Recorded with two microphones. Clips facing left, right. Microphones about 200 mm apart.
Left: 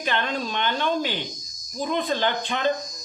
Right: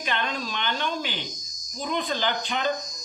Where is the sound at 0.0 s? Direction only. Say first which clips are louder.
Left 3 dB; 50° left (ahead or behind).